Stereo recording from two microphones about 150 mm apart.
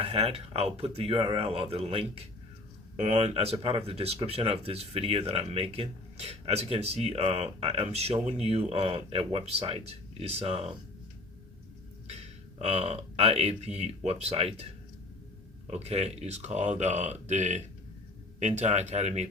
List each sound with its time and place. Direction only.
0.0 s speech: 40° right (ahead or behind)
12.0 s speech: 45° right (ahead or behind)